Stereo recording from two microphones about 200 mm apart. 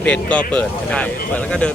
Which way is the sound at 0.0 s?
5° left (ahead or behind).